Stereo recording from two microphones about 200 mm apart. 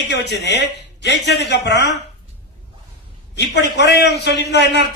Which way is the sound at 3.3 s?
60° left (ahead or behind).